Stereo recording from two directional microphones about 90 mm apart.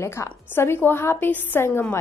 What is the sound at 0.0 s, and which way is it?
A woman's voice, 30° left (ahead or behind).